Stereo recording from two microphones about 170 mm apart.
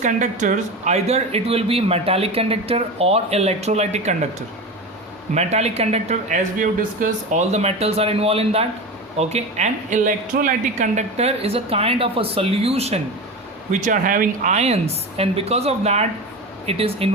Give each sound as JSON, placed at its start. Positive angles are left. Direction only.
{"t": 0.0, "sound": "speech", "side_deg": -45}
{"t": 5.3, "sound": "speech", "side_deg": -40}